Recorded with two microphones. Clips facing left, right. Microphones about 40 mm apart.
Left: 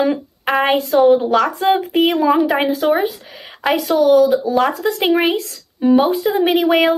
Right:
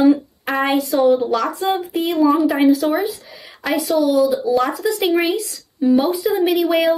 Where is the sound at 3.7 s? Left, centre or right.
Left.